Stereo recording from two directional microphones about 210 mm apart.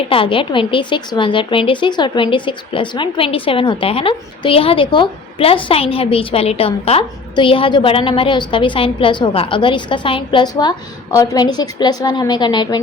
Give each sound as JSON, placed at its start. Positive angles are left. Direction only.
{"t": 0.1, "sound": "speech", "side_deg": 25}